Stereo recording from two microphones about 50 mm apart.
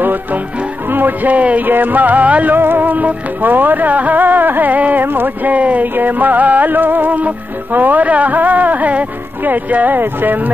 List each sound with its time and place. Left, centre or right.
0.0 s music: right
2.5 s music: right